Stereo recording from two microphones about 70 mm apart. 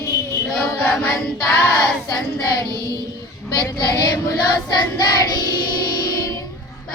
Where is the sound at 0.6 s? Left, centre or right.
Left.